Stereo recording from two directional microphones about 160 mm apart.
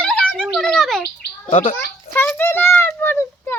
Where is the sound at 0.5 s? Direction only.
5° left (ahead or behind).